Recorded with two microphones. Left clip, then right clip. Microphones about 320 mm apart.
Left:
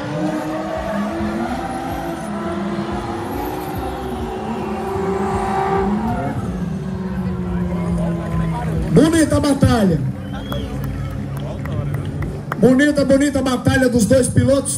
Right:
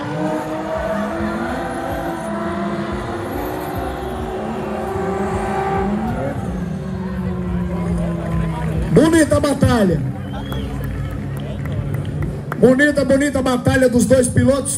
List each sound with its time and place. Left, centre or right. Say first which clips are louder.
0.8 s vehicle: right 1 dB; centre
5.0 s vehicle: left 3 dB; centre
8.9 s a sound: right 1 dB; right
12.6 s a man's voice: right 1 dB; right